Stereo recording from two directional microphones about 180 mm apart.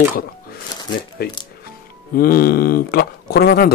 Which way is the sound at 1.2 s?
60° left (ahead or behind).